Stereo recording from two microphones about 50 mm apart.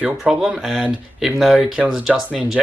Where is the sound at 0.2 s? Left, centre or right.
Centre.